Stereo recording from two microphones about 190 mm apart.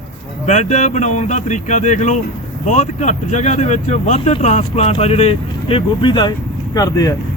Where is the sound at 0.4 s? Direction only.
35° left (ahead or behind).